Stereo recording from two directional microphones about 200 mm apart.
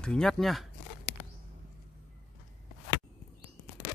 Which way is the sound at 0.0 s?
5° left (ahead or behind).